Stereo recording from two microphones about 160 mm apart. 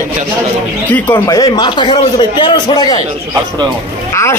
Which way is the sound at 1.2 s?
25° left (ahead or behind).